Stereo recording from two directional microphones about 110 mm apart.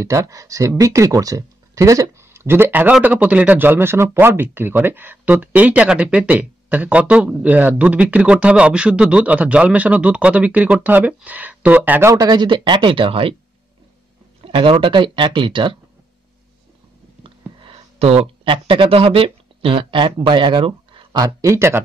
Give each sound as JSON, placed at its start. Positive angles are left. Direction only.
{"t": 0.0, "sound": "speech", "side_deg": -30}
{"t": 12.1, "sound": "speech", "side_deg": -35}
{"t": 14.4, "sound": "speech", "side_deg": -50}
{"t": 17.6, "sound": "speech", "side_deg": -60}
{"t": 21.2, "sound": "speech", "side_deg": -30}